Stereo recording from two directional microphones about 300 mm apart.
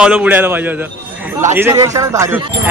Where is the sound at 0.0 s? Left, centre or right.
Centre.